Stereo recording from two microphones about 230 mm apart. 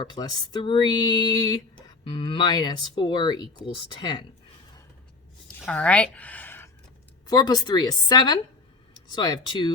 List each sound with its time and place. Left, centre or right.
0.0 s speech: centre
5.5 s a sound: centre
7.3 s speech: centre